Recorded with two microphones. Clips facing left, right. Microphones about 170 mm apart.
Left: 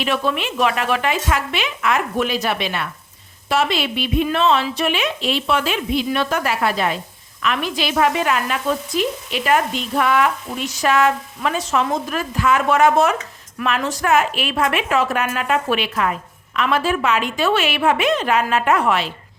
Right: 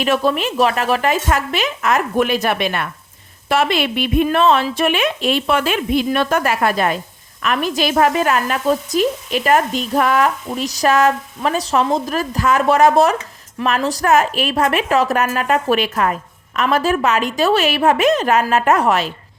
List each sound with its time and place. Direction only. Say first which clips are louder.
0.0 s a woman's voice: right 4 dB; 40° right (ahead or behind)